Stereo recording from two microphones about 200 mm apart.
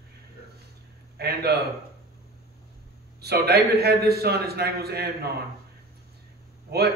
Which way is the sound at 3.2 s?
55° right (ahead or behind).